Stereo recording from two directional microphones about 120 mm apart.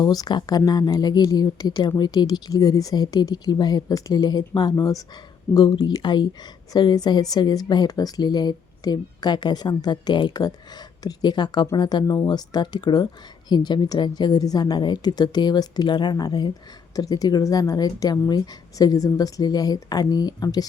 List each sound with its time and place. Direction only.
0.0 s speech: 35° left (ahead or behind)